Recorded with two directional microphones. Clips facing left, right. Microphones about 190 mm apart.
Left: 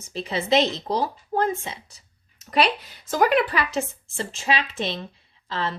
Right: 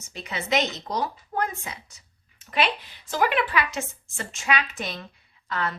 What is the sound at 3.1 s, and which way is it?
A woman's voice, 40° left (ahead or behind).